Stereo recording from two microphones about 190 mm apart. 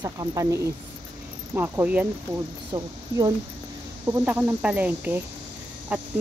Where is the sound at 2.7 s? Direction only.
20° right (ahead or behind).